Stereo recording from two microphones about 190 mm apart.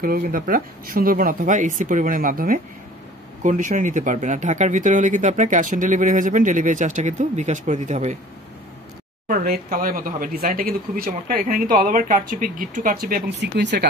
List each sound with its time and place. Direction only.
0.0 s speech: 50° right (ahead or behind)
9.3 s speech: 50° right (ahead or behind)
13.3 s speech: 65° right (ahead or behind)